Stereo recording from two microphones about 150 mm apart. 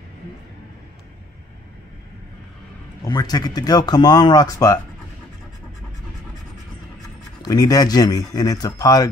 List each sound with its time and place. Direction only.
3.0 s speech: 25° left (ahead or behind)
7.4 s speech: 25° left (ahead or behind)